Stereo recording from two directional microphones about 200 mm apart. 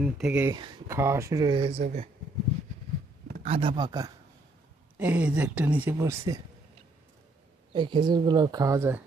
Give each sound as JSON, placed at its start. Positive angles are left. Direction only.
{"t": 0.0, "sound": "speech", "side_deg": -5}
{"t": 0.5, "sound": "speech", "side_deg": -20}
{"t": 3.4, "sound": "speech", "side_deg": -25}
{"t": 4.9, "sound": "speech", "side_deg": -10}
{"t": 7.7, "sound": "speech", "side_deg": -25}